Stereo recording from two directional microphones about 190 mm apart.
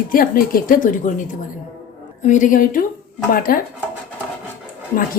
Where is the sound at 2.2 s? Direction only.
40° left (ahead or behind).